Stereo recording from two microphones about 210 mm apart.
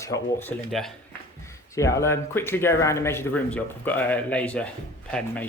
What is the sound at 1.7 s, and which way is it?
Speech, 15° left (ahead or behind).